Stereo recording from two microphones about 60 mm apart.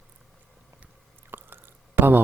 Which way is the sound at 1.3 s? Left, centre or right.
Right.